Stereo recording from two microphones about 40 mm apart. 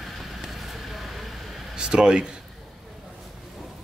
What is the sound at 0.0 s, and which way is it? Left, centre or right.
Vehicle, centre.